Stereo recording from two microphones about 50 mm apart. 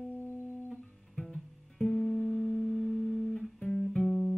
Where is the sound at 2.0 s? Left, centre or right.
Right.